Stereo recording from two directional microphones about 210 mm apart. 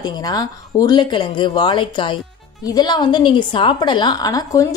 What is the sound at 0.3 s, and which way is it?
A woman's voice, 20° left (ahead or behind).